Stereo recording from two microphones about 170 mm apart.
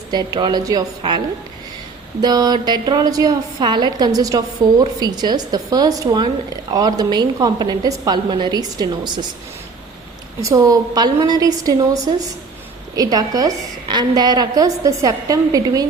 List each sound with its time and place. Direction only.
0.1 s a woman's voice: 25° right (ahead or behind)
2.2 s a woman's voice: 25° right (ahead or behind)
10.4 s a woman's voice: 20° right (ahead or behind)
13.0 s a woman's voice: 20° right (ahead or behind)